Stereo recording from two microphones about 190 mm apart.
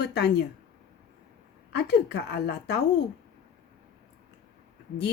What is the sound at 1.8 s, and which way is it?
A woman's voice, 60° left (ahead or behind).